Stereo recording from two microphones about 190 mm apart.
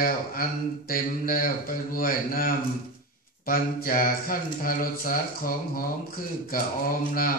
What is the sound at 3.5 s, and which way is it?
Speech, 50° left (ahead or behind).